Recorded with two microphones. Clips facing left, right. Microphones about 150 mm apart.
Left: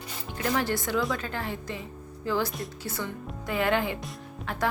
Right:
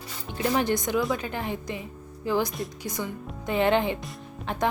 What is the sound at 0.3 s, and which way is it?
Speech, 20° right (ahead or behind).